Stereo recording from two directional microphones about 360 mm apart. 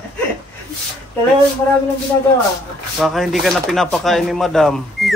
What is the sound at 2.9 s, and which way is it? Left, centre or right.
Speech, centre.